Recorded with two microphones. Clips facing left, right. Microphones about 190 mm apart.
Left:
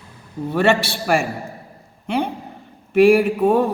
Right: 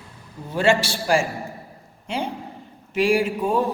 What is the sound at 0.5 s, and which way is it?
A man's voice, 60° left (ahead or behind).